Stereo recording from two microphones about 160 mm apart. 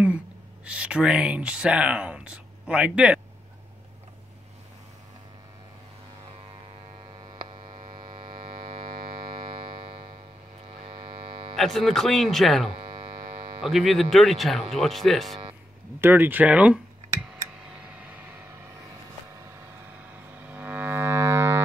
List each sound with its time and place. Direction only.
0.7 s speech: 5° right (ahead or behind)
7.3 s mains hum: 35° right (ahead or behind)
7.9 s music: 35° right (ahead or behind)
9.8 s tick-tock: 35° right (ahead or behind)
10.8 s music: 30° right (ahead or behind)
11.5 s speech: centre (ahead or behind)
12.7 s hum: 30° right (ahead or behind)
13.6 s speech: centre (ahead or behind)
16.0 s speech: 10° right (ahead or behind)
17.6 s tick: 5° right (ahead or behind)
20.0 s music: 10° right (ahead or behind)